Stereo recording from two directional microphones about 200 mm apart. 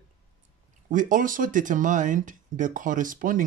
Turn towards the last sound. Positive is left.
turn(degrees=-40)  # may be behind; listen again after turning